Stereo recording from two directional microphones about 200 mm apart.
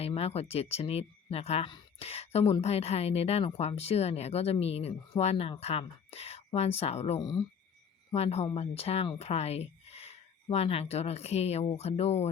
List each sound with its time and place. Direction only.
0.0 s speech: 30° left (ahead or behind)
8.1 s speech: 30° left (ahead or behind)